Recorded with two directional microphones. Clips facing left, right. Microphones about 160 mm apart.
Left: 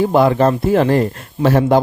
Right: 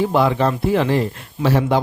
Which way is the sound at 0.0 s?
45° left (ahead or behind).